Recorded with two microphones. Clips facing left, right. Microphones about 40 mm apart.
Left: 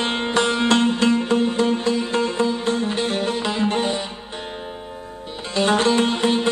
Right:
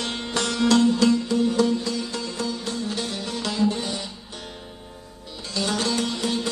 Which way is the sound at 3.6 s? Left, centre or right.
Left.